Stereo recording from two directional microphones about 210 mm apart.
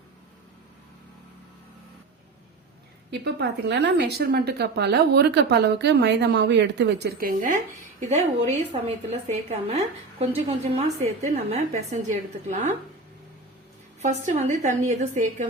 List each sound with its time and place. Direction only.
3.1 s a woman's voice: 55° right (ahead or behind)
8.1 s a woman's voice: 30° right (ahead or behind)
14.0 s a woman's voice: 35° right (ahead or behind)